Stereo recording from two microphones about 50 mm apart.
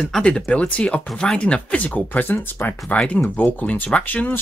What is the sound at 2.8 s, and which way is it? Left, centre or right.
Speech, left.